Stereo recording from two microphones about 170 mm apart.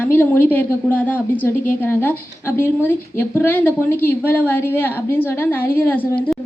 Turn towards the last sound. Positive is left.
turn(degrees=10)  # may be behind; listen again after turning